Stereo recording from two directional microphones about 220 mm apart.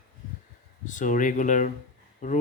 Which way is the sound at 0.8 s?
35° left (ahead or behind).